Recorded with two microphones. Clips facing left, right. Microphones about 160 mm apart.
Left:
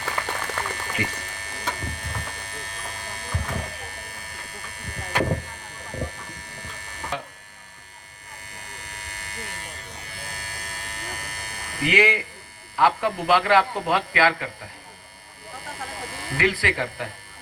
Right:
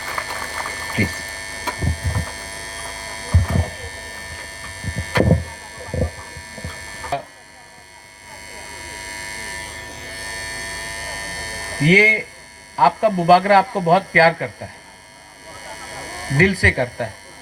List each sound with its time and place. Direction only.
0.3 s a sound: 35° right (ahead or behind)
8.5 s electric shaver: 35° right (ahead or behind)
12.7 s a man's voice: 40° right (ahead or behind)
15.7 s sheep: 40° right (ahead or behind)